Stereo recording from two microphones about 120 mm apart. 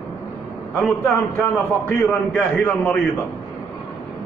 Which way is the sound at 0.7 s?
5° left (ahead or behind).